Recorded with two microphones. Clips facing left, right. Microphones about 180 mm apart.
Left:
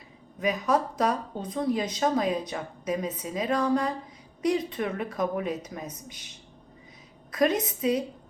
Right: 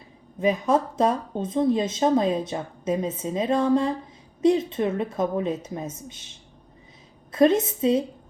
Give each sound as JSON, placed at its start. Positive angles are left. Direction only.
{"t": 0.3, "sound": "a woman's voice", "side_deg": -25}